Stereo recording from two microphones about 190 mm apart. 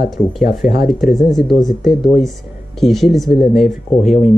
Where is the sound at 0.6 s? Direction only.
50° left (ahead or behind).